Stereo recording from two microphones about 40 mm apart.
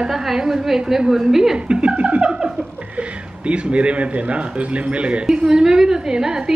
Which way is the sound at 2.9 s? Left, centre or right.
Right.